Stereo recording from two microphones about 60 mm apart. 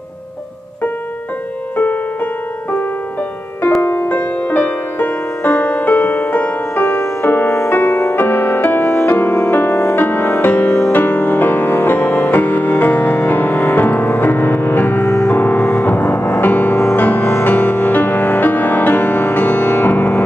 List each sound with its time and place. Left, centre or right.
3.8 s music: left